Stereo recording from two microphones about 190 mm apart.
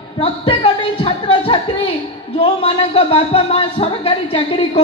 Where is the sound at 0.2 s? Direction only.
30° left (ahead or behind).